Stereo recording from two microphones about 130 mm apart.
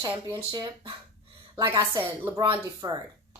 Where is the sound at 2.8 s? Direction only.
40° right (ahead or behind).